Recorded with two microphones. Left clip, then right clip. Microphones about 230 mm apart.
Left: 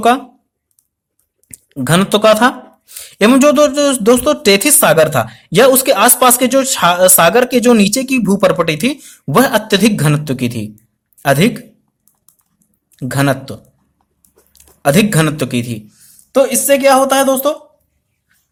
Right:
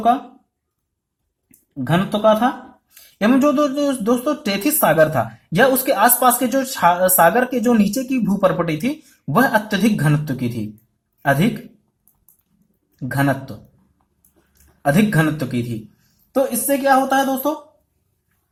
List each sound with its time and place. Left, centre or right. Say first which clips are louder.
1.7 s speech: left 8 dB; left
13.0 s speech: left 5 dB; left
14.8 s speech: left 5 dB; left